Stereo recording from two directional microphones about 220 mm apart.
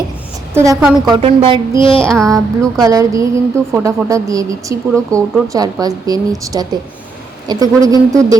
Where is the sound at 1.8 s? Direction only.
25° left (ahead or behind).